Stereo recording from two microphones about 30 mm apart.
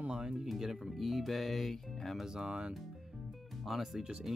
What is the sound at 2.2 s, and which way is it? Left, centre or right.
Speech, right.